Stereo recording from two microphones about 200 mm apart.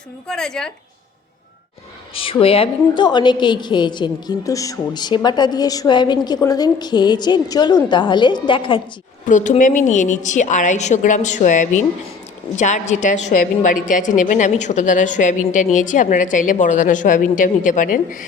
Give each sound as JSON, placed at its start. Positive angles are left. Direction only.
{"t": 0.3, "sound": "a woman's voice", "side_deg": 5}
{"t": 2.1, "sound": "a woman's voice", "side_deg": 25}
{"t": 9.2, "sound": "a woman's voice", "side_deg": 40}